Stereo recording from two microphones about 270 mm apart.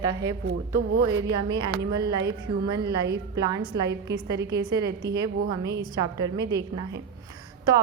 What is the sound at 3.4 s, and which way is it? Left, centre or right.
A woman's voice, centre.